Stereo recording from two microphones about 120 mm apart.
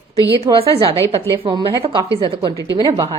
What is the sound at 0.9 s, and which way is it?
Speech, 20° left (ahead or behind).